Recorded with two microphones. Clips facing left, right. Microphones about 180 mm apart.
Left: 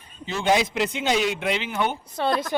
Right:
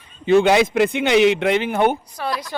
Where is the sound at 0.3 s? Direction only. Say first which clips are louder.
Right 8 dB; 65° right (ahead or behind).